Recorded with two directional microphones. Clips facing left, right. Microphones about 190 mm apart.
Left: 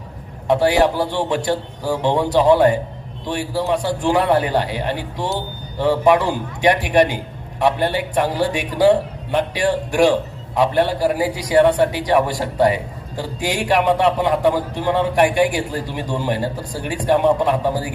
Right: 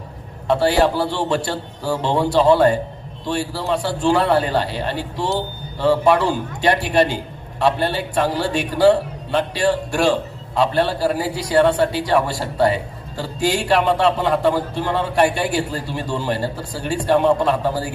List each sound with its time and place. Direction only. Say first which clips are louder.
0.4 s a man's voice: left 1 dB; 15° left (ahead or behind)